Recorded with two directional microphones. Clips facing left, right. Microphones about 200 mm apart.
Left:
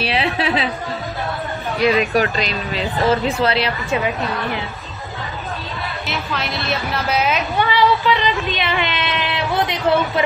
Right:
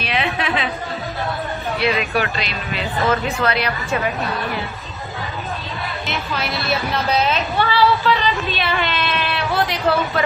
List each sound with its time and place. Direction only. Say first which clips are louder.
0.0 s a woman's voice: left 2 dB; 30° left (ahead or behind)
1.8 s speech: left 5 dB; 40° left (ahead or behind)
6.0 s speech: even; centre (ahead or behind)
7.2 s a woman's voice: left 1 dB; 15° left (ahead or behind)